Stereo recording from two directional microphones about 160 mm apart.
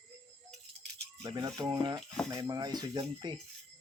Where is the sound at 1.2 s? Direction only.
25° right (ahead or behind).